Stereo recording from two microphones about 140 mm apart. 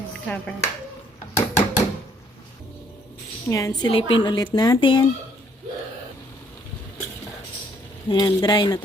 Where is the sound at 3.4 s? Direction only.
25° left (ahead or behind).